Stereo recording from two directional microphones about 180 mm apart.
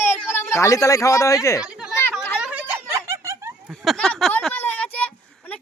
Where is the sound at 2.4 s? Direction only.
5° right (ahead or behind).